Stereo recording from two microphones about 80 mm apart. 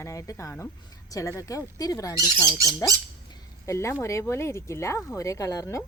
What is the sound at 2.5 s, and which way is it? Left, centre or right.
Speech, right.